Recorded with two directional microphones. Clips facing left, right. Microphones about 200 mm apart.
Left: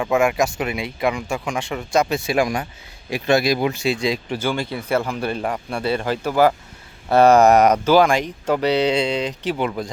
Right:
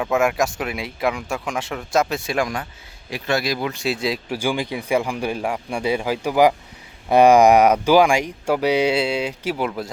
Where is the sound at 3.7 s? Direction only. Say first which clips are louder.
Left 2 dB; centre (ahead or behind).